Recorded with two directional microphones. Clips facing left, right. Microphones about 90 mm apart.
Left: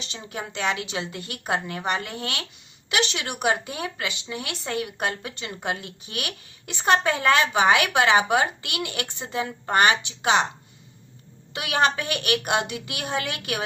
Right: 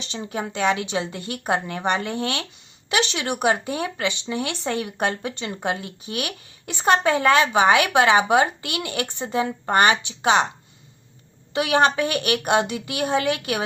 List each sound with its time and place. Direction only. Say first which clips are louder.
0.1 s speech: right 7 dB; 25° right (ahead or behind)
11.5 s speech: right 4 dB; 30° right (ahead or behind)